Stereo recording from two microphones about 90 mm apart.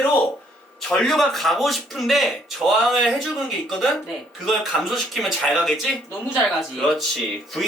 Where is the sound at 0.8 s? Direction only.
5° left (ahead or behind).